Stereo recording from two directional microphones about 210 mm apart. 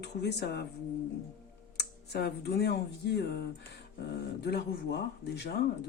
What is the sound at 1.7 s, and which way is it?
Speech, 50° left (ahead or behind).